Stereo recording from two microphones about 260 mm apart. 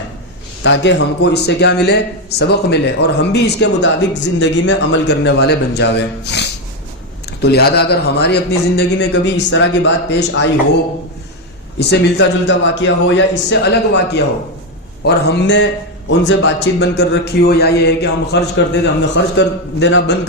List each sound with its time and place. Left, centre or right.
0.6 s speech: left
11.8 s a man's voice: left